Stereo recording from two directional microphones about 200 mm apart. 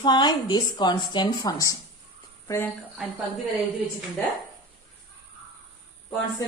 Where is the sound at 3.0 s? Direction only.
Centre (ahead or behind).